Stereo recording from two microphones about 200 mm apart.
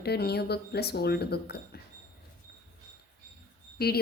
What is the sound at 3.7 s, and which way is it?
Speech, 50° left (ahead or behind).